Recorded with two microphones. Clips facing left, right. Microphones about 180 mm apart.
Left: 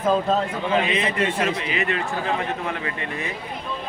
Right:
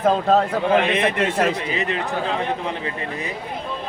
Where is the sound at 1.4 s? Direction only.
40° right (ahead or behind).